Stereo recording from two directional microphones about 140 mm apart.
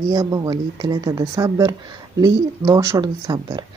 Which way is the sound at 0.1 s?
25° right (ahead or behind).